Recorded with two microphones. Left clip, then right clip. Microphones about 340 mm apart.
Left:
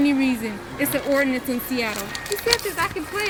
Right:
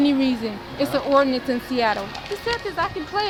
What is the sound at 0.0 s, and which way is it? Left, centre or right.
A woman's voice, centre.